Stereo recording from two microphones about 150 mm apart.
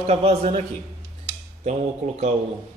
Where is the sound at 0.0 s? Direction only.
40° right (ahead or behind).